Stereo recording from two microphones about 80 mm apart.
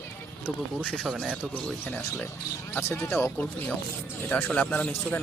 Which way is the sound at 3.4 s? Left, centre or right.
Centre.